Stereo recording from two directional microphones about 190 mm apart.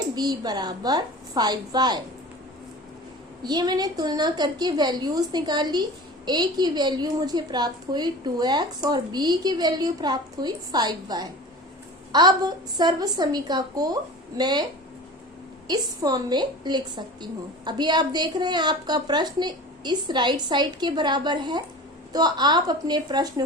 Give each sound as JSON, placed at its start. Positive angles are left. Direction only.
{"t": 0.2, "sound": "a woman's voice", "side_deg": -20}
{"t": 3.4, "sound": "a woman's voice", "side_deg": -20}
{"t": 15.6, "sound": "a woman's voice", "side_deg": -20}